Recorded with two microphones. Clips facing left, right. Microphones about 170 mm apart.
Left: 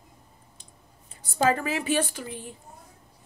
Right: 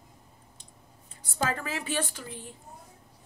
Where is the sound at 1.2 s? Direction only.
10° left (ahead or behind).